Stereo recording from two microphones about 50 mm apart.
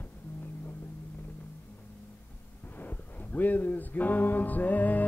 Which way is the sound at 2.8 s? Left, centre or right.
Left.